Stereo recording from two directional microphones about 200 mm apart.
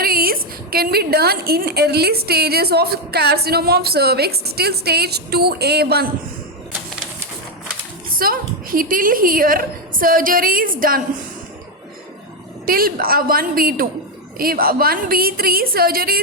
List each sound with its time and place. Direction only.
0.0 s a woman's voice: 50° right (ahead or behind)
8.1 s a woman's voice: 45° right (ahead or behind)
12.6 s a woman's voice: 45° right (ahead or behind)